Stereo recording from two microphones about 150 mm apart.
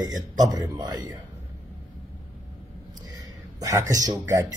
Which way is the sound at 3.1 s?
25° right (ahead or behind).